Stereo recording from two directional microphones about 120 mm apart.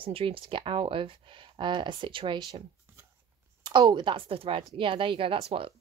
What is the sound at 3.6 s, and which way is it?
Speech, 40° right (ahead or behind).